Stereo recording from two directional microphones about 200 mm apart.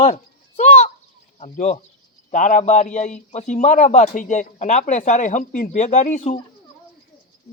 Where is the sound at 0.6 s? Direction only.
35° left (ahead or behind).